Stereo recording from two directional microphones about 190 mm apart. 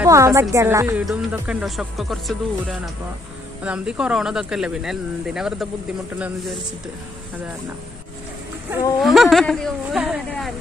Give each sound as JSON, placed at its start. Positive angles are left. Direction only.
{"t": 0.0, "sound": "a woman's voice", "side_deg": -15}
{"t": 9.0, "sound": "speech", "side_deg": 0}